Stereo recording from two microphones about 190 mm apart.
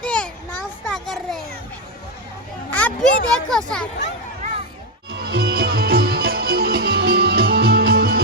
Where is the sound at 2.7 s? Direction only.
10° left (ahead or behind).